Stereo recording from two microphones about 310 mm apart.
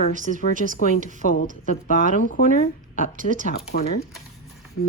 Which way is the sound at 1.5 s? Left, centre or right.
Right.